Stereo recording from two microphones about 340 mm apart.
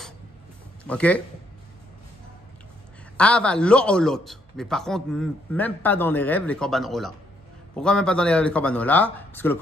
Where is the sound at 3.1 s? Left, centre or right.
Centre.